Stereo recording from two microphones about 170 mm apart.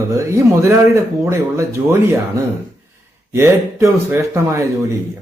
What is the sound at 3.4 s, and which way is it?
Speech, 15° right (ahead or behind).